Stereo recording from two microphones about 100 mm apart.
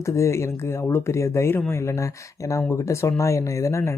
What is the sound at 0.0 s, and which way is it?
Speech, 30° left (ahead or behind).